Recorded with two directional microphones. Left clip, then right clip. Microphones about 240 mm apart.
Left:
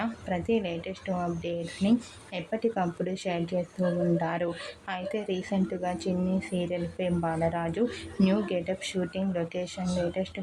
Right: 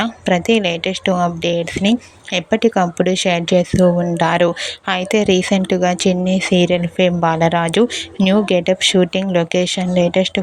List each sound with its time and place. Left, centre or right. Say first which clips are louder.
0.0 s speech: right 15 dB; right